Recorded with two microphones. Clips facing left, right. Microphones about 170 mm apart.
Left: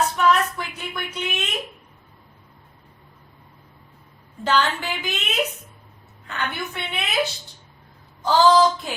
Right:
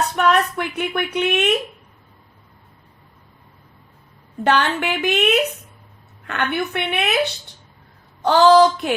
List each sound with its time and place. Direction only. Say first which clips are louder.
0.2 s speech: right 5 dB; 65° right (ahead or behind)
4.4 s a woman's voice: right 3 dB; 65° right (ahead or behind)
8.2 s a woman's voice: right 4 dB; 65° right (ahead or behind)